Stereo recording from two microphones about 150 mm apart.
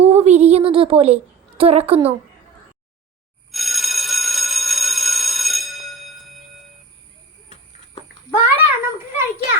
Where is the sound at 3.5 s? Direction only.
Centre (ahead or behind).